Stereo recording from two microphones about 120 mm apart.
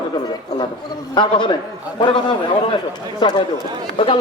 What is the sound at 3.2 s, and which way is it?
Speech, 40° left (ahead or behind).